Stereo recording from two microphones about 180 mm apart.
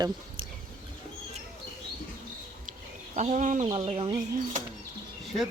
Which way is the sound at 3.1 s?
40° right (ahead or behind).